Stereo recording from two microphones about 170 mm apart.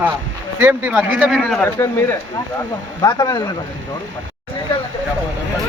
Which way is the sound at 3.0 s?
20° left (ahead or behind).